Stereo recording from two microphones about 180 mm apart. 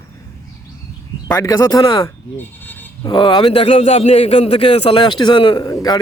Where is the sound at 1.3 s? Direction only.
20° left (ahead or behind).